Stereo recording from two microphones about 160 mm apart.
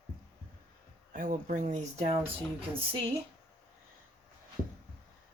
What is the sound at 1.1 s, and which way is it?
Speech, 50° right (ahead or behind).